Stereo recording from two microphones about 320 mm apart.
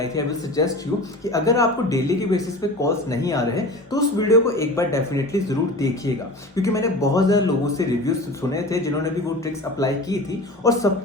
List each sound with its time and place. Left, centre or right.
0.0 s a man's voice: centre